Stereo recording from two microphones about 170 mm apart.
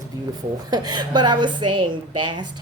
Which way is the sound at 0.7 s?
25° right (ahead or behind).